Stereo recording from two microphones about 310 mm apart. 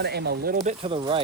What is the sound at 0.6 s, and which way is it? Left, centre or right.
Speech, centre.